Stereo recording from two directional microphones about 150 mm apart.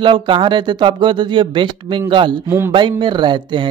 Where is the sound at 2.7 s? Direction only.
30° right (ahead or behind).